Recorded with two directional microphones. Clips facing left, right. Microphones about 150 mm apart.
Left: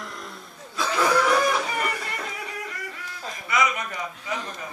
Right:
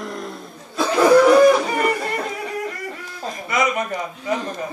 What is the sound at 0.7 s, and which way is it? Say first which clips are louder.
Snicker: right 9 dB; 45° right (ahead or behind).